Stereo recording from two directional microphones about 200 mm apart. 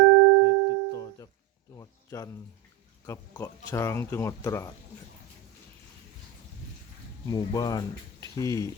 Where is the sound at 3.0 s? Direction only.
15° left (ahead or behind).